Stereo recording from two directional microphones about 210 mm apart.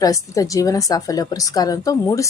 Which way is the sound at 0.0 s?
15° left (ahead or behind).